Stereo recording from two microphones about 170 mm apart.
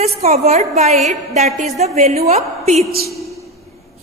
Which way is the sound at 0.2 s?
40° right (ahead or behind).